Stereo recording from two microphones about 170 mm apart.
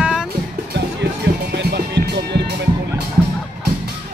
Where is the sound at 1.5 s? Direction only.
80° right.